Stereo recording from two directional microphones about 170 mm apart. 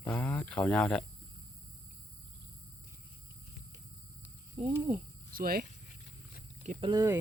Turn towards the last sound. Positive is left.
turn(degrees=-30)  # may be behind; listen again after turning